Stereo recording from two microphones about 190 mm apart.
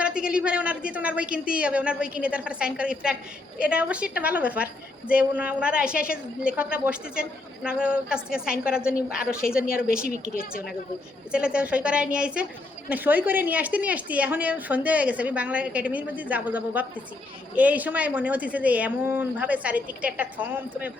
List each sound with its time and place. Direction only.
0.0 s a woman's voice: 5° right (ahead or behind)
10.0 s speech: 40° right (ahead or behind)
11.3 s a woman's voice: 5° right (ahead or behind)